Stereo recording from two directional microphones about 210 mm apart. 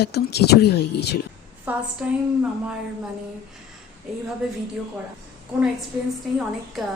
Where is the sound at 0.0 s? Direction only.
50° left (ahead or behind).